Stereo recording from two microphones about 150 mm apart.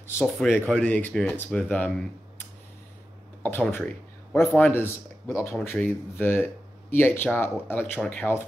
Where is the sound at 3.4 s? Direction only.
15° left (ahead or behind).